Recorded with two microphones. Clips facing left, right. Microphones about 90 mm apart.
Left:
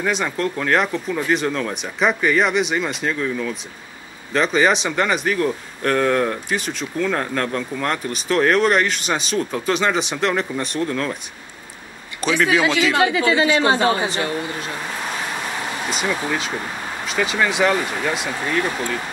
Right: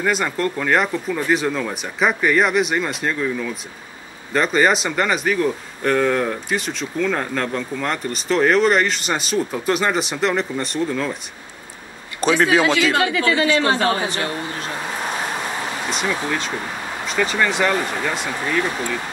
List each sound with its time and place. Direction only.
0.0 s speech: centre (ahead or behind)
12.2 s a man's voice: 30° right (ahead or behind)
12.9 s speech: 20° left (ahead or behind)
15.9 s speech: 5° left (ahead or behind)